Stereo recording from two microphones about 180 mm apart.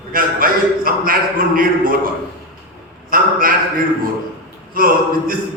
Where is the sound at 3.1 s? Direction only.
50° right (ahead or behind).